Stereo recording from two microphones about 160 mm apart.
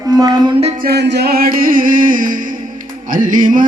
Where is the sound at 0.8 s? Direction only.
90° right; by 3.6 s 55° right (ahead or behind).